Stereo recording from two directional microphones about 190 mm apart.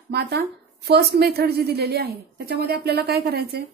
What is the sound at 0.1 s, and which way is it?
A woman's voice, 60° right (ahead or behind).